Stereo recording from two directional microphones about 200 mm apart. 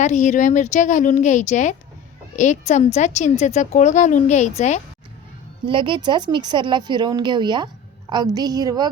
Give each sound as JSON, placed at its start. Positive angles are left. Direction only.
{"t": 0.0, "sound": "a woman's voice", "side_deg": 35}
{"t": 5.6, "sound": "a woman's voice", "side_deg": -25}